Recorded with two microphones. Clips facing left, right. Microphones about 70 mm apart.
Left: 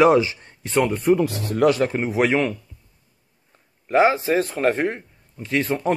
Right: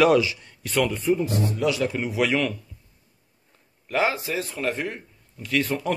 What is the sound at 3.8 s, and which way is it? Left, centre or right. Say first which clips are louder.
Speech: left 7 dB; left.